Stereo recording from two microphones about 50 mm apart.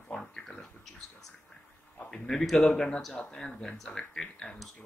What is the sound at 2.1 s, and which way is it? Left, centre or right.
Speech, centre.